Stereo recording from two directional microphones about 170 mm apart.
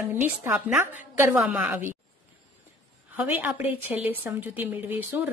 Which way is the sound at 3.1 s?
10° right (ahead or behind).